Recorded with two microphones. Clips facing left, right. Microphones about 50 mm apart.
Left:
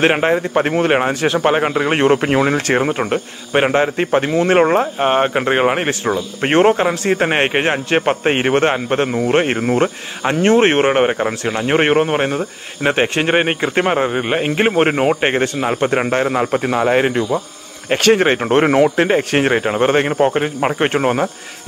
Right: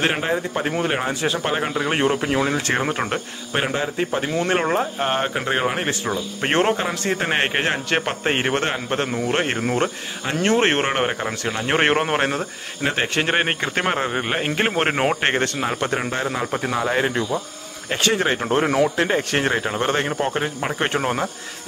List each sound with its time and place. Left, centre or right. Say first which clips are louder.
0.0 s a man's voice: left 7 dB; left
2.9 s a man's voice: left 5 dB; centre
3.5 s a man's voice: left 8 dB; left
4.3 s speech: left 8 dB; left
10.2 s speech: left 6 dB; left
11.6 s speech: left 5 dB; centre
12.8 s speech: left 6 dB; left
13.2 s a man's voice: left 5 dB; centre; by 16.4 s left
16.5 s speech: left 6 dB; left
17.9 s a man's voice: left 7 dB; left